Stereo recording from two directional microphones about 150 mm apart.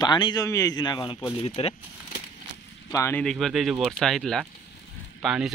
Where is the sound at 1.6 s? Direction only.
40° left (ahead or behind).